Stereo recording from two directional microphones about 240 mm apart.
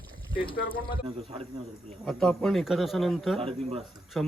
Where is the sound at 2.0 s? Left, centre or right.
Centre.